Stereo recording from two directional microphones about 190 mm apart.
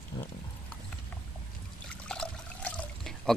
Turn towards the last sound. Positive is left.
turn(degrees=5)  # may be behind; listen again after turning